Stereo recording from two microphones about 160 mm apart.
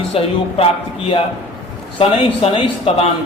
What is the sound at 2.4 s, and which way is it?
Speech, 35° left (ahead or behind).